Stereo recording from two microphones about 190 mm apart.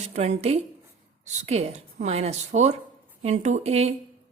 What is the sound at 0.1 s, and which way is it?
Speech, 35° right (ahead or behind).